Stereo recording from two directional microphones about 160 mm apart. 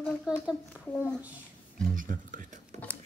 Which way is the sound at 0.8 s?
10° left (ahead or behind).